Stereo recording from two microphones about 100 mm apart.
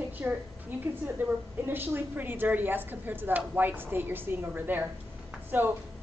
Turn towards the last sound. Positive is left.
turn(degrees=-20)  # may be behind; listen again after turning